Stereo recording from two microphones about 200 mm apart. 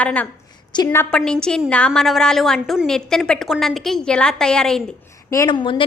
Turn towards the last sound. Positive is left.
turn(degrees=25)  # may be behind; listen again after turning